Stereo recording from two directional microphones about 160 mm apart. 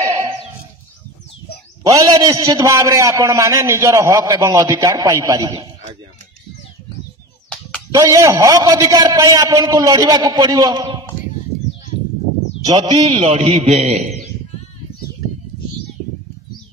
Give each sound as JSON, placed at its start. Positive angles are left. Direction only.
{"t": 1.8, "sound": "a man's voice", "side_deg": -20}
{"t": 7.4, "sound": "a sound", "side_deg": 5}
{"t": 8.1, "sound": "a man's voice", "side_deg": -20}
{"t": 12.6, "sound": "a man's voice", "side_deg": -25}
{"t": 13.2, "sound": "a man's voice", "side_deg": -40}